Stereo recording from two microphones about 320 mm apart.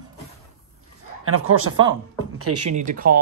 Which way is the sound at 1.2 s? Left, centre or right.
Right.